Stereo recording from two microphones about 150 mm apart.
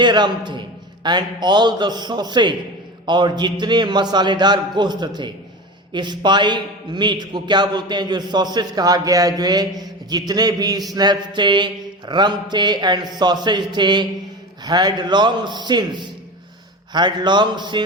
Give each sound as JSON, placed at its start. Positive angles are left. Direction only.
{"t": 0.0, "sound": "a man's voice", "side_deg": -30}